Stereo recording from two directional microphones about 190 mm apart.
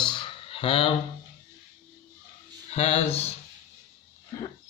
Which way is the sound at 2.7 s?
35° left (ahead or behind).